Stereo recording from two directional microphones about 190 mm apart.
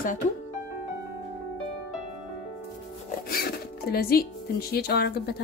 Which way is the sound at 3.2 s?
55° left (ahead or behind).